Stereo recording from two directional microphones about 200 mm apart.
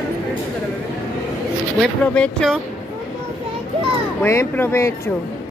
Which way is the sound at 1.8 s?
5° left (ahead or behind).